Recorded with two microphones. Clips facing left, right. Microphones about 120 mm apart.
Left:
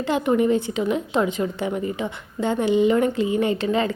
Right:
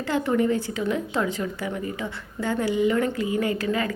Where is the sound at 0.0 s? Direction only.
20° left (ahead or behind).